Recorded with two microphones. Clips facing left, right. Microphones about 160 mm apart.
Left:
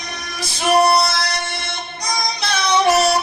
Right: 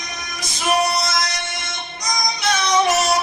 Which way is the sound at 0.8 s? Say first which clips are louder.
Left 5 dB; 30° left (ahead or behind).